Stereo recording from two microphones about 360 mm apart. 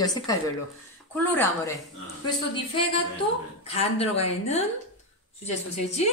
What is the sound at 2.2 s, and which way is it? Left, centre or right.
A woman's voice, centre.